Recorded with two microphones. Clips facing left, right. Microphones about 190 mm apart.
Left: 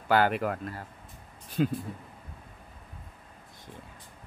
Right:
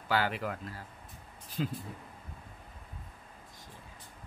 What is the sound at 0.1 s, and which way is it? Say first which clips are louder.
Speech: left 7 dB; 55° left (ahead or behind).